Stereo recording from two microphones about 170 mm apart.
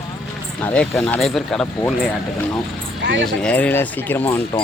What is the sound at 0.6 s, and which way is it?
Speech, 5° left (ahead or behind).